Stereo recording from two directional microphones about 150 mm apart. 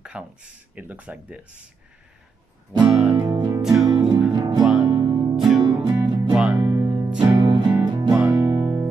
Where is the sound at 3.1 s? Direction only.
25° right (ahead or behind).